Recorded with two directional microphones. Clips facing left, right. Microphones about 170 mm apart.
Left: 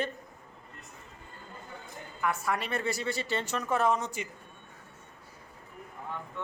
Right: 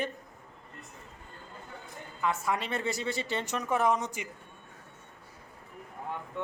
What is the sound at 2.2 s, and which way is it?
Speech, 20° right (ahead or behind).